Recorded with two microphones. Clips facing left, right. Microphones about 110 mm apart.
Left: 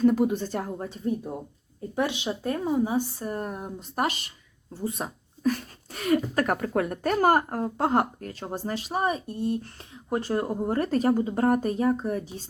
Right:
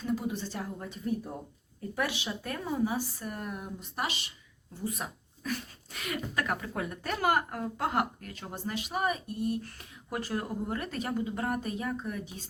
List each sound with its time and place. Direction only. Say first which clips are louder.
0.0 s speech: left 11 dB; 55° left (ahead or behind)
2.0 s speech: left 6 dB; 25° left (ahead or behind); by 4.3 s 50° left (ahead or behind)
4.8 s speech: left 5 dB; 30° left (ahead or behind)